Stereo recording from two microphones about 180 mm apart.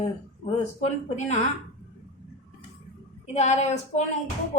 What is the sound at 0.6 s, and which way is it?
Speech, 40° left (ahead or behind).